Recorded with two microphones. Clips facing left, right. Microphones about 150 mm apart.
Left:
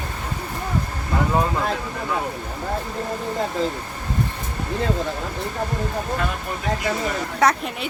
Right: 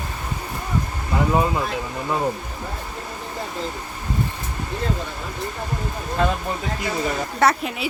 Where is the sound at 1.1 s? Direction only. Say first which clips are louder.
Right 1 dB; 5° right (ahead or behind).